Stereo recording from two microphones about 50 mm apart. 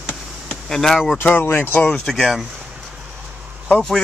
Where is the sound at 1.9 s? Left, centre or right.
Centre.